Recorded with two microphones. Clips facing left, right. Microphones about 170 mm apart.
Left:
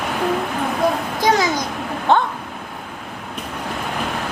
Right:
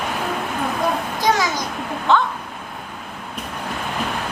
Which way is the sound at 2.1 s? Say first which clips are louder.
Left 1 dB; 55° left (ahead or behind).